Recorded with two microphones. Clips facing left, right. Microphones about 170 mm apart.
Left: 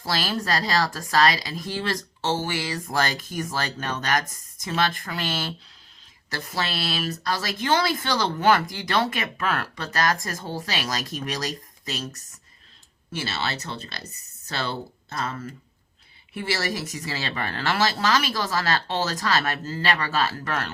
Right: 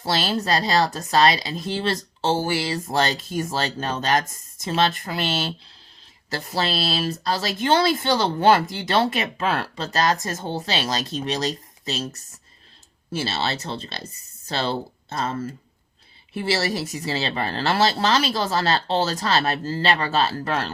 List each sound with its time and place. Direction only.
0.0 s speech: 25° right (ahead or behind)